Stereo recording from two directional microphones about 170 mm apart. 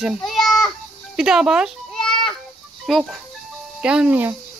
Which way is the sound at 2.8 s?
Centre (ahead or behind).